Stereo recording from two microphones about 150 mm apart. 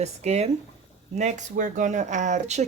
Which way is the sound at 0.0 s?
45° right (ahead or behind).